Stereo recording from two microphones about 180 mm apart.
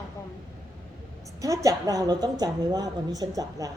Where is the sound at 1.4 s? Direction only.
20° right (ahead or behind).